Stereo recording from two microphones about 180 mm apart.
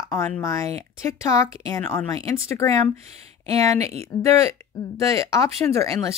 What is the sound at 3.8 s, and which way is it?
Speech, 35° right (ahead or behind).